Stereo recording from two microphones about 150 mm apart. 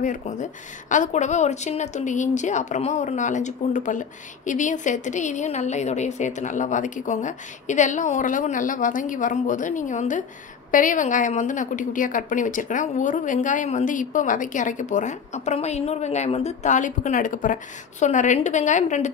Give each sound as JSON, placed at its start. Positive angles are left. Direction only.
{"t": 0.0, "sound": "speech", "side_deg": 55}